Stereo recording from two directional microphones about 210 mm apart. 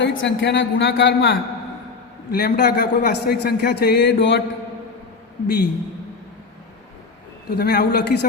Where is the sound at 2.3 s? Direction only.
50° left (ahead or behind).